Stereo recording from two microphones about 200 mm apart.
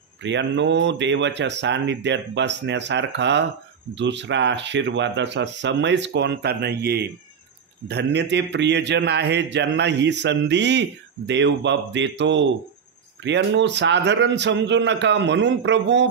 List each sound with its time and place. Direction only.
0.2 s a man's voice: 65° right (ahead or behind)